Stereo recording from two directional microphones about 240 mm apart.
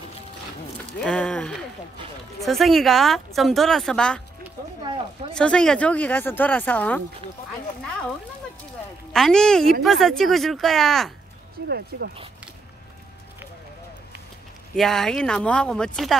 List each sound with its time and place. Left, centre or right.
1.0 s a woman's voice: centre
5.3 s speech: centre
9.1 s a woman's voice: centre
11.6 s speech: right
14.8 s a woman's voice: centre